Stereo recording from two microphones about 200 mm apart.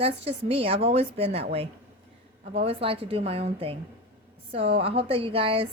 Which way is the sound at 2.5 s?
30° right (ahead or behind).